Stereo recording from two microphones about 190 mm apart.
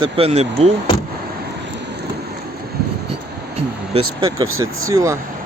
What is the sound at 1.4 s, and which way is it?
Rain, 65° right (ahead or behind).